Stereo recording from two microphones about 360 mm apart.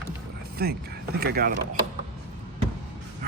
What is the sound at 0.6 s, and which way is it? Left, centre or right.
Speech, right.